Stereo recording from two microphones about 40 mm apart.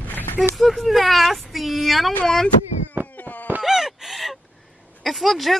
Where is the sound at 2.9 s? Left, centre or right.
Right.